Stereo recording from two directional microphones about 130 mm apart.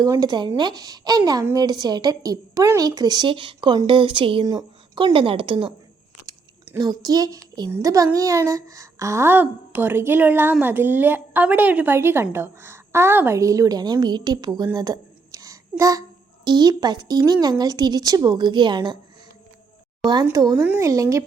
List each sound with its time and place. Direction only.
0.0 s a woman's voice: 30° right (ahead or behind)
6.7 s a woman's voice: 30° right (ahead or behind)
20.3 s a woman's voice: 30° right (ahead or behind)